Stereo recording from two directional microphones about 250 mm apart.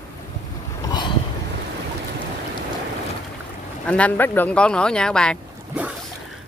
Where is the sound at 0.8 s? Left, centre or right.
Centre.